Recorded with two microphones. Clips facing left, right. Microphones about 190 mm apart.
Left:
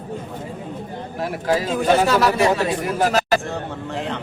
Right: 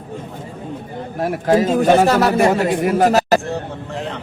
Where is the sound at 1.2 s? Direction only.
50° right (ahead or behind).